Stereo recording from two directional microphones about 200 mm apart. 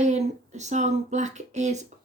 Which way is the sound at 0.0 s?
35° right (ahead or behind).